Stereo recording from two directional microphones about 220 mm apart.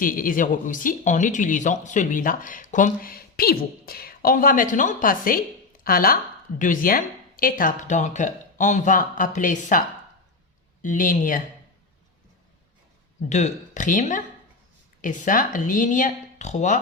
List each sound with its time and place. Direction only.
0.0 s speech: 40° left (ahead or behind)
10.8 s speech: 35° left (ahead or behind)
13.2 s speech: 30° left (ahead or behind)